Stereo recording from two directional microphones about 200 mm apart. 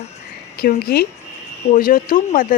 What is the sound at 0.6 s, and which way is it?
A woman's voice, 50° left (ahead or behind).